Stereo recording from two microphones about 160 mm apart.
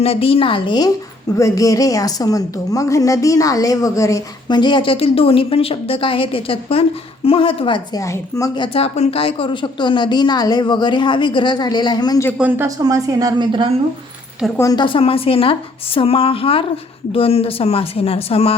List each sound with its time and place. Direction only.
0.0 s a woman's voice: 35° left (ahead or behind)
8.0 s a woman's voice: 20° left (ahead or behind)
12.4 s a woman's voice: 10° right (ahead or behind); by 13.7 s 30° right (ahead or behind)
14.6 s speech: 25° left (ahead or behind)